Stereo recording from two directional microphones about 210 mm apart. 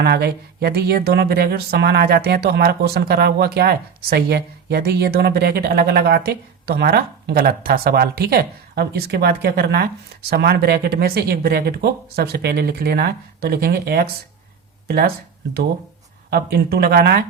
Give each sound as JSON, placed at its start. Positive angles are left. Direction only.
{"t": 0.0, "sound": "speech", "side_deg": -50}
{"t": 16.3, "sound": "speech", "side_deg": -50}